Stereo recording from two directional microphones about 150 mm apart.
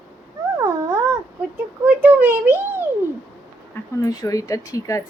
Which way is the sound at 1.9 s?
10° right (ahead or behind).